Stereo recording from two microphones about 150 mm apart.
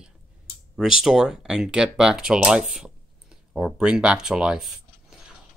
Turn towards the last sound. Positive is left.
turn(degrees=-5)  # may be behind; listen again after turning